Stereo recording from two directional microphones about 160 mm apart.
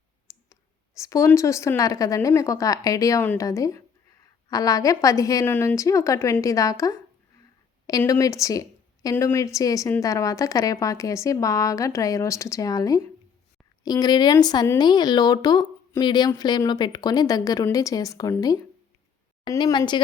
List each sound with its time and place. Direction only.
0.3 s clicking: 20° left (ahead or behind)
0.9 s speech: 20° left (ahead or behind)